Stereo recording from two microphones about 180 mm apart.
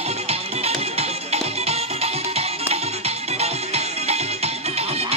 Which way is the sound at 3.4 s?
35° right (ahead or behind).